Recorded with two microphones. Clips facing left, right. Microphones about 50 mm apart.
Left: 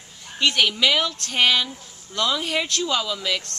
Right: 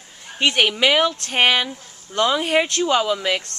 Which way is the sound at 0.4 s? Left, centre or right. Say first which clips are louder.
Right 2 dB; right.